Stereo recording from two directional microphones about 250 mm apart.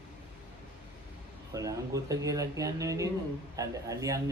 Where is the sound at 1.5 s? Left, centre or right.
Centre.